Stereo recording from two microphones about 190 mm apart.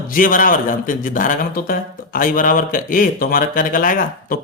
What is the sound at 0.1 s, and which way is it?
Speech, 45° left (ahead or behind).